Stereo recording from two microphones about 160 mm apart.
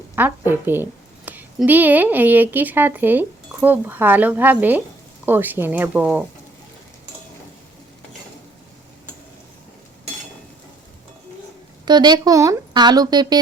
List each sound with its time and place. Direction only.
0.2 s a woman's voice: 15° right (ahead or behind)
11.9 s speech: 25° right (ahead or behind)